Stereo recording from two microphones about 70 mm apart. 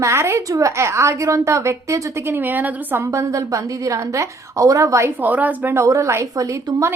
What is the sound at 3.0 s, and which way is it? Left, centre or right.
Speech, right.